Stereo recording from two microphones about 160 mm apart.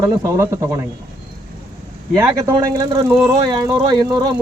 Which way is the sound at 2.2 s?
15° right (ahead or behind).